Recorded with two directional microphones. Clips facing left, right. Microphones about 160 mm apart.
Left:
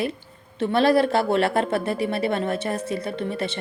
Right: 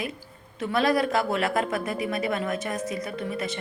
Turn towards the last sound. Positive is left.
turn(degrees=30)  # may be behind; listen again after turning